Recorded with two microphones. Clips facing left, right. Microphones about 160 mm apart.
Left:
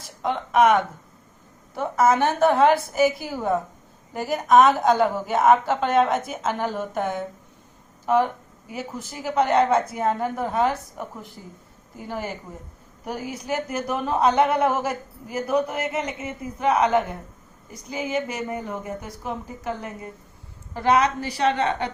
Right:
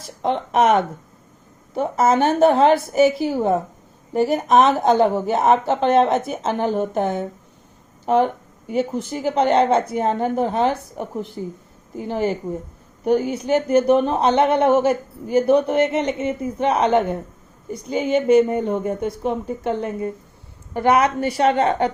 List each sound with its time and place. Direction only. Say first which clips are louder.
0.2 s speech: right 1 dB; 30° right (ahead or behind)
21.5 s speech: right 6 dB; 40° right (ahead or behind)